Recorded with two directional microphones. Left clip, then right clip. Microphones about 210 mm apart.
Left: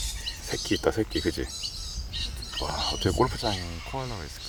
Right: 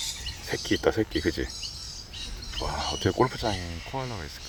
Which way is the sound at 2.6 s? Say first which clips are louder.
Left 1 dB; centre (ahead or behind).